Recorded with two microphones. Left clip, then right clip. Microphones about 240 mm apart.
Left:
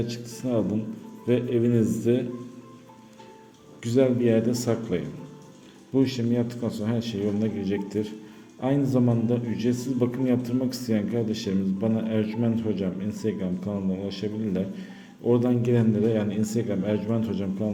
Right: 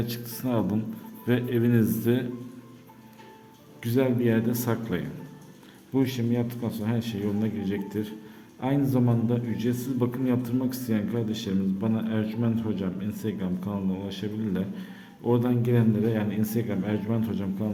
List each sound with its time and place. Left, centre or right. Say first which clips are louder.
0.0 s speech: left 1 dB; centre
3.8 s a man's voice: left 3 dB; centre